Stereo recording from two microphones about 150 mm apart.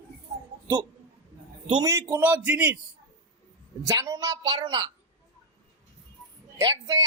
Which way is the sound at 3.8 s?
20° right (ahead or behind).